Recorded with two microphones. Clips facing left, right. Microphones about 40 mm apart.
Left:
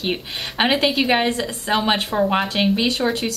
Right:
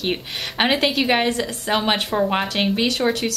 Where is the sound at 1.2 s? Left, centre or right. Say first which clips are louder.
Even; left.